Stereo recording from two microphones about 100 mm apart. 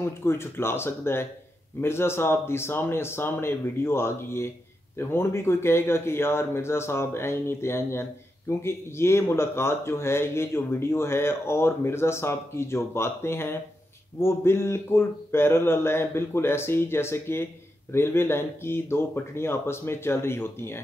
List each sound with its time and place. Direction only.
0.0 s speech: 25° left (ahead or behind)